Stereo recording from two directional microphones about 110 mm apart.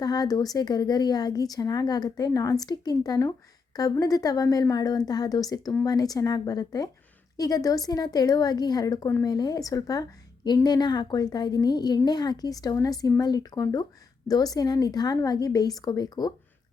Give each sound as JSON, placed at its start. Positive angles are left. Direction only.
{"t": 0.0, "sound": "a woman's voice", "side_deg": 35}